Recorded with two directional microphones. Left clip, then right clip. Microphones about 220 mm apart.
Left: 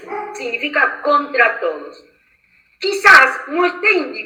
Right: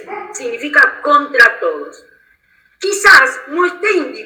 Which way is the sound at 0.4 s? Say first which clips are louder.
Right 6 dB; 35° right (ahead or behind).